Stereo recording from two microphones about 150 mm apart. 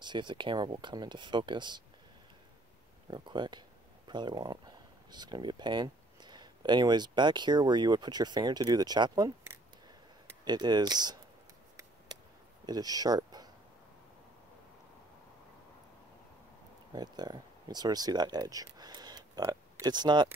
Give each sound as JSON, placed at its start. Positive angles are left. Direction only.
{"t": 0.0, "sound": "speech", "side_deg": -30}
{"t": 3.1, "sound": "speech", "side_deg": -30}
{"t": 10.4, "sound": "speech", "side_deg": -30}
{"t": 12.6, "sound": "speech", "side_deg": -25}
{"t": 16.9, "sound": "speech", "side_deg": -25}